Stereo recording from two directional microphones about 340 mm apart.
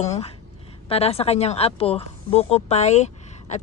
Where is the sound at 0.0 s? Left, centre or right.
Centre.